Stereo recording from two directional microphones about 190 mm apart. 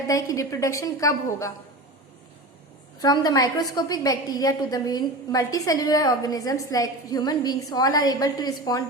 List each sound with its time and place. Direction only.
0.1 s a woman's voice: 15° left (ahead or behind)
3.0 s a woman's voice: 20° left (ahead or behind)